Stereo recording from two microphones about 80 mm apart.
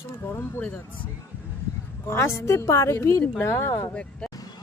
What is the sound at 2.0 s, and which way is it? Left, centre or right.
Speech, left.